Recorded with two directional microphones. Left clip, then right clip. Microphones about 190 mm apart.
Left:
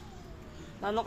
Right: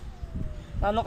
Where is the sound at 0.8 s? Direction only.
50° right (ahead or behind).